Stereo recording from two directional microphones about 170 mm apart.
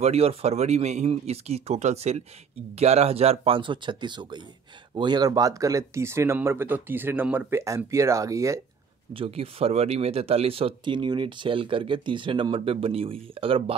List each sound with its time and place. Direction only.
0.0 s speech: 35° right (ahead or behind); by 8.5 s 20° right (ahead or behind)
9.1 s speech: 35° right (ahead or behind)